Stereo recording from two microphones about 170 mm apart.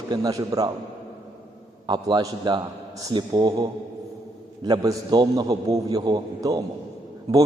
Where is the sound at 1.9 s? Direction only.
25° right (ahead or behind).